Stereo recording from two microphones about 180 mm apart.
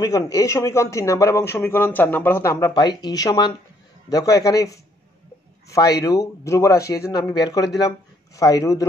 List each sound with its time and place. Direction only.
0.0 s a man's voice: 20° left (ahead or behind)